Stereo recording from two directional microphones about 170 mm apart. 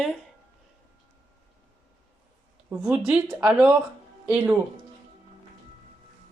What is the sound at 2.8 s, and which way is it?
Speech, 5° right (ahead or behind).